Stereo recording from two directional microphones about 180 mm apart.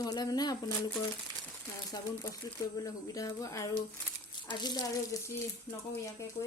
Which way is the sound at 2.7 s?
20° left (ahead or behind).